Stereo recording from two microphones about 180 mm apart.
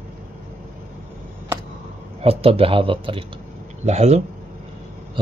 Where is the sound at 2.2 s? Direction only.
30° right (ahead or behind).